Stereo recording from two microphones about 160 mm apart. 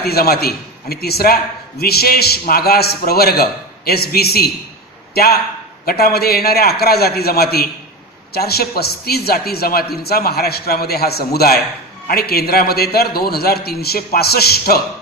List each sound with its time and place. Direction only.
0.0 s a man's voice: 75° left (ahead or behind)